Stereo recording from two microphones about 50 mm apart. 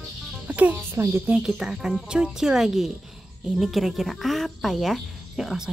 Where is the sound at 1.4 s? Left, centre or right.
Centre.